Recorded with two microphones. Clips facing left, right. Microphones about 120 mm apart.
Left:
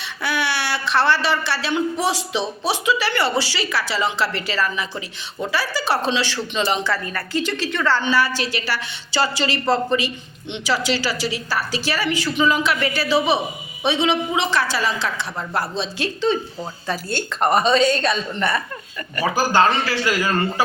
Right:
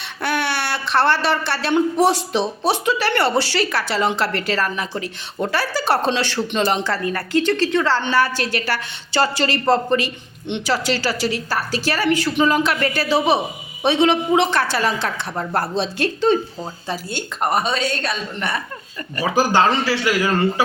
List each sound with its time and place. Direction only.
0.2 s a woman's voice: 55° right (ahead or behind)
7.7 s a man's voice: 30° right (ahead or behind)
8.0 s a woman's voice: 50° right (ahead or behind)
16.9 s a woman's voice: 15° right (ahead or behind)
19.1 s a man's voice: 25° right (ahead or behind)